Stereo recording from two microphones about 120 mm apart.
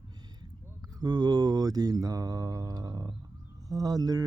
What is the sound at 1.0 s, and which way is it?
Music, 35° right (ahead or behind).